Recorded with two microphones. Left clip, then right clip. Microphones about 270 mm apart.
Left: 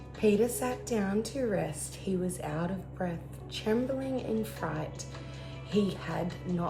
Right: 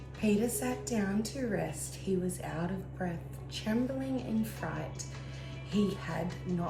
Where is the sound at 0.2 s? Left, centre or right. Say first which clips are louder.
Left 5 dB; left.